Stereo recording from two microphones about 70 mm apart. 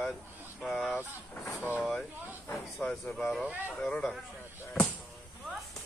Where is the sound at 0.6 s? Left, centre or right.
Centre.